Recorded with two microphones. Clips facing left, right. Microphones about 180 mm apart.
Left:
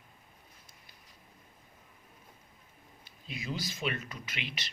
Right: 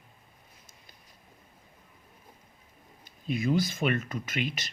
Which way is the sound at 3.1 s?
50° right (ahead or behind).